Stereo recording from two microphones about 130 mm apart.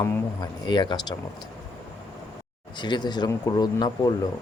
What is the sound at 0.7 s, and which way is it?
Speech, 35° left (ahead or behind).